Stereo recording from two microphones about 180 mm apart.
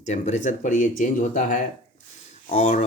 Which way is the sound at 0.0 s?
40° left (ahead or behind).